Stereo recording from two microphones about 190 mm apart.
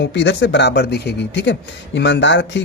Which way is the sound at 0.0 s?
65° left (ahead or behind).